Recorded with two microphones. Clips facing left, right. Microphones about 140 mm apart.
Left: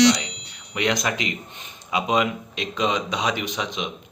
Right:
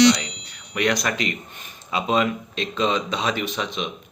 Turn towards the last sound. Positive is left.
turn(degrees=15)  # may be behind; listen again after turning